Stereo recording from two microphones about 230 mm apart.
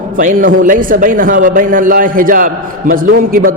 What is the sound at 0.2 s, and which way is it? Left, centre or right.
A man's voice, right.